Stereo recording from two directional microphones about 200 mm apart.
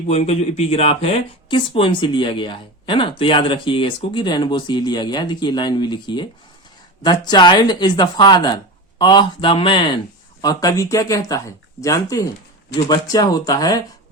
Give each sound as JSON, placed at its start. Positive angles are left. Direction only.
{"t": 0.1, "sound": "speech", "side_deg": 30}